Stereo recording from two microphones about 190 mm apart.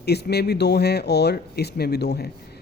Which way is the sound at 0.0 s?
60° left (ahead or behind).